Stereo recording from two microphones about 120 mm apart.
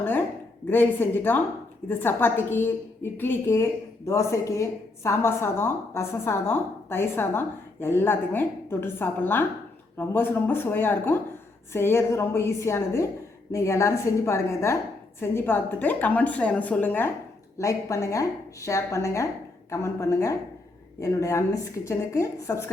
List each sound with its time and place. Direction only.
0.0 s a sound: 15° left (ahead or behind)
0.7 s a woman's voice: 15° left (ahead or behind)
17.6 s a woman's voice: 25° left (ahead or behind)